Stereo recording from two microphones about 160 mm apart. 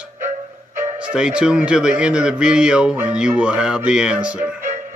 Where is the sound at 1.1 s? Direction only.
5° right (ahead or behind).